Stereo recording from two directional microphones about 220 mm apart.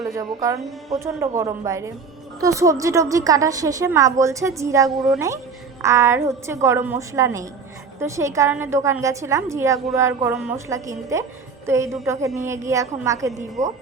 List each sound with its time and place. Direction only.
0.1 s a woman's voice: 15° right (ahead or behind)